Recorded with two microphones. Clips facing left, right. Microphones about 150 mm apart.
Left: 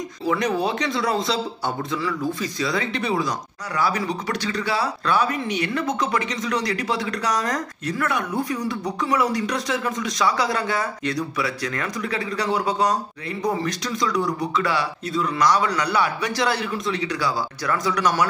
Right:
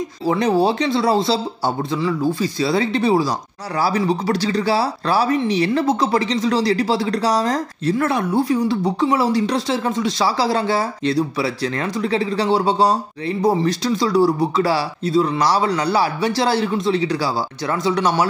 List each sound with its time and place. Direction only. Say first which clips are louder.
0.3 s speech: right 6 dB; 30° right (ahead or behind)